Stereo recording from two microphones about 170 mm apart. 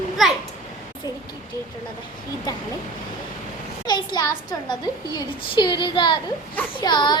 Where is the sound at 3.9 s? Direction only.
25° left (ahead or behind).